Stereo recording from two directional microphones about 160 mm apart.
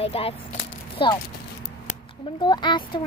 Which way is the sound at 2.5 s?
30° left (ahead or behind).